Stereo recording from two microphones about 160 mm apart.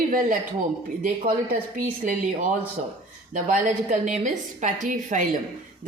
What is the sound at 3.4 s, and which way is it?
Speech, 50° right (ahead or behind).